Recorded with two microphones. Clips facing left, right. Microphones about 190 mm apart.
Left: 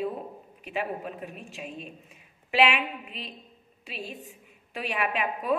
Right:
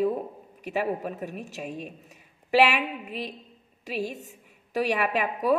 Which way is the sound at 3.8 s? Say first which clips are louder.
Right 8 dB; 40° right (ahead or behind).